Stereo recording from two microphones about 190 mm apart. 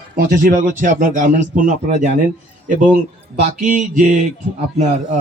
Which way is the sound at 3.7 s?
40° right (ahead or behind).